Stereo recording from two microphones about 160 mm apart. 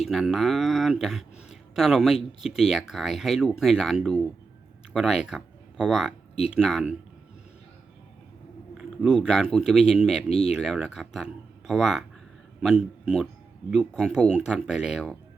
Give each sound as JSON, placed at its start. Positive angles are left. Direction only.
{"t": 0.0, "sound": "speech", "side_deg": 0}
{"t": 8.8, "sound": "speech", "side_deg": 0}
{"t": 10.2, "sound": "speech", "side_deg": 40}
{"t": 10.5, "sound": "speech", "side_deg": -5}